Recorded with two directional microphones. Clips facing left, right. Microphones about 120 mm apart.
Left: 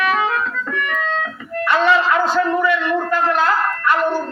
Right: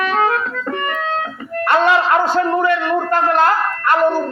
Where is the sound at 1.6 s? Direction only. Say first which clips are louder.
Right 1 dB; 55° right (ahead or behind).